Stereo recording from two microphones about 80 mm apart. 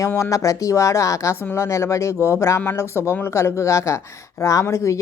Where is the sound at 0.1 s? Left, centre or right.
Left.